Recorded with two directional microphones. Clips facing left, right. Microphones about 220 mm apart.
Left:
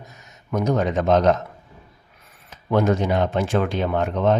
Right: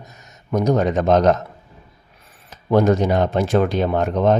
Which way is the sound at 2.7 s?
40° right (ahead or behind).